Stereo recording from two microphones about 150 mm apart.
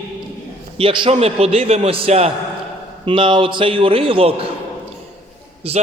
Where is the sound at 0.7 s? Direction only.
35° right (ahead or behind).